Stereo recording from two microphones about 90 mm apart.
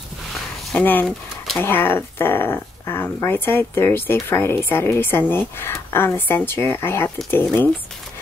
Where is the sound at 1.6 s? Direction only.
25° left (ahead or behind).